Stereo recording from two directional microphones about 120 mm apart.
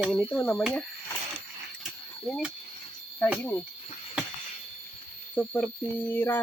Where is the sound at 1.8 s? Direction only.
Centre (ahead or behind).